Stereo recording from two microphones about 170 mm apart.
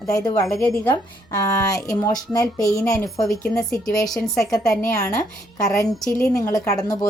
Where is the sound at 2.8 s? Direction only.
5° left (ahead or behind).